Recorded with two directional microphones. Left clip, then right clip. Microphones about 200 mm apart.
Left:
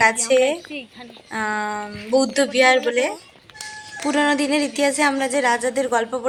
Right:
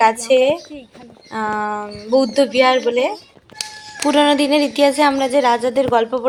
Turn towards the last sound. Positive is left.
turn(degrees=-15)  # may be behind; listen again after turning